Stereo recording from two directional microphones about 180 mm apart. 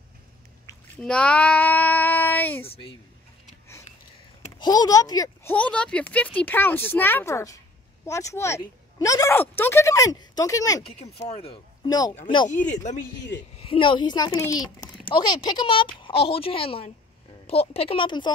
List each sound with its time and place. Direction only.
0.7 s a sound: 15° left (ahead or behind)
1.0 s child singing: 5° left (ahead or behind)
2.6 s a woman's voice: 30° left (ahead or behind)
4.6 s a child's voice: 20° left (ahead or behind)
5.5 s speech: 5° left (ahead or behind)
11.1 s speech: 35° left (ahead or behind)
13.6 s speech: 30° left (ahead or behind)